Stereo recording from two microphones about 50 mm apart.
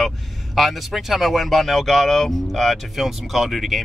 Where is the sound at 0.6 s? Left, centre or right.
Centre.